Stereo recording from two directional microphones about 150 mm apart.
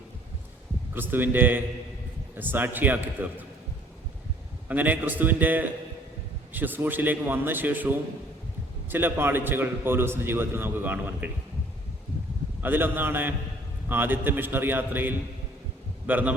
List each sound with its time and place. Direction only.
0.9 s a man's voice: 15° right (ahead or behind)
4.7 s a man's voice: 10° right (ahead or behind)
12.6 s a man's voice: 15° right (ahead or behind)